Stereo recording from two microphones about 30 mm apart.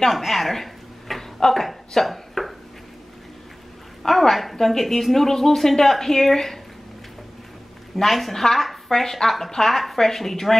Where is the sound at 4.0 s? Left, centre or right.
Centre.